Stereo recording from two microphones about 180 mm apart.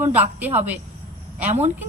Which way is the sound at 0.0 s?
10° right (ahead or behind).